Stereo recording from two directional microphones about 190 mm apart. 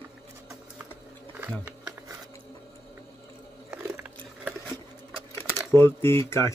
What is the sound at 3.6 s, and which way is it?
Biting, 10° right (ahead or behind).